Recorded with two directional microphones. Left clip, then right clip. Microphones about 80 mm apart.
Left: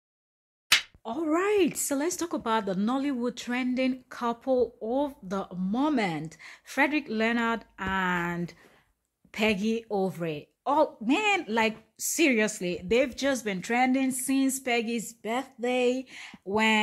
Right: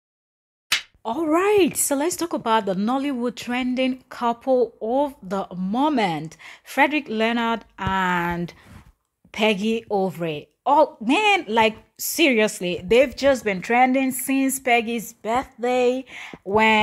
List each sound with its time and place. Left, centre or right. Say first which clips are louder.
0.7 s slap: even; centre
1.0 s speech: right 7 dB; right
11.1 s speech: right 7 dB; right
13.2 s speech: right 9 dB; right
13.9 s speech: right 6 dB; right
16.4 s speech: right 8 dB; right